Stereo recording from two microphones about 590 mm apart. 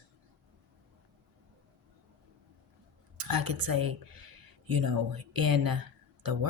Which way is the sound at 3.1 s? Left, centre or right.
Right.